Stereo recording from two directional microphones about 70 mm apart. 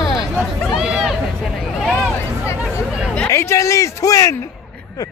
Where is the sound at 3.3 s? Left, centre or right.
Left.